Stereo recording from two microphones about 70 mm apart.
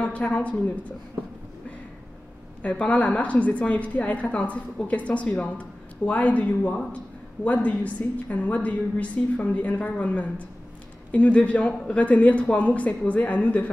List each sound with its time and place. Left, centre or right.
0.0 s a woman's voice: centre
2.6 s a woman's voice: centre